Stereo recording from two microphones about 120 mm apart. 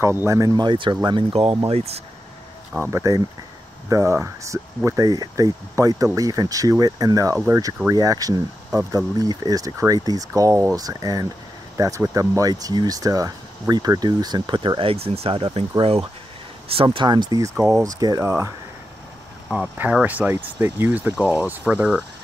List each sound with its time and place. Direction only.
0.0 s speech: 20° right (ahead or behind)
0.7 s speech: 40° right (ahead or behind); by 2.0 s 60° right (ahead or behind)
2.8 s speech: 25° right (ahead or behind)
19.5 s speech: 10° right (ahead or behind)